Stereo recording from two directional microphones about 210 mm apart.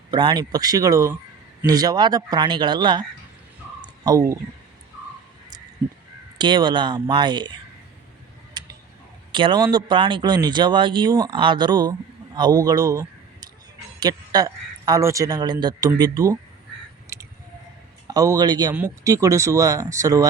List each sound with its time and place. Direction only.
0.1 s speech: 20° right (ahead or behind)
4.0 s speech: 15° right (ahead or behind)
6.4 s speech: 20° right (ahead or behind)
8.6 s tick-tock: 20° right (ahead or behind)
9.3 s a man's voice: 20° right (ahead or behind)
17.1 s a sound: 15° right (ahead or behind)
18.1 s speech: 15° right (ahead or behind)